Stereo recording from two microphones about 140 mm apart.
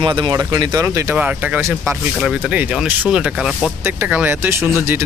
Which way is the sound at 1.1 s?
10° right (ahead or behind).